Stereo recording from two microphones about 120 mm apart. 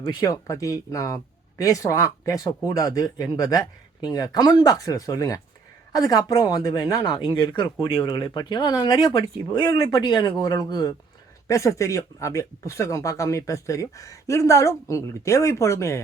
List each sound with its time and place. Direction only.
0.2 s speech: 30° left (ahead or behind)